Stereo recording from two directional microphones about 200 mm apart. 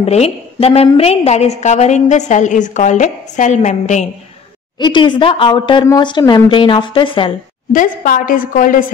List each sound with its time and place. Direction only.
0.0 s a woman's voice: 30° left (ahead or behind)
4.7 s speech: 25° left (ahead or behind)
7.7 s a woman's voice: 45° left (ahead or behind)